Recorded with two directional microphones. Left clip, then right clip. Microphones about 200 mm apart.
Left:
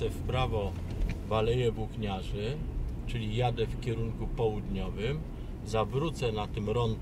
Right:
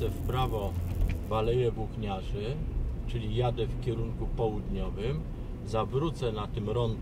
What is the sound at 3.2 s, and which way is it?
Speech, 20° left (ahead or behind).